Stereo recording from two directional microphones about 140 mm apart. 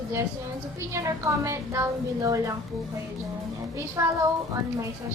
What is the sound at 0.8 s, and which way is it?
A woman's voice, 20° right (ahead or behind).